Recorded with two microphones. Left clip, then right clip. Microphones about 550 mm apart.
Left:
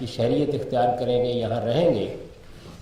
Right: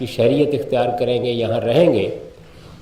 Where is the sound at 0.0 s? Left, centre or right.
Right.